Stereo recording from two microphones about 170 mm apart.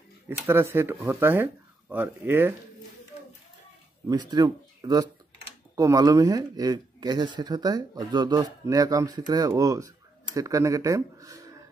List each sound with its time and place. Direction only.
0.3 s speech: 15° right (ahead or behind)
4.1 s speech: 25° right (ahead or behind)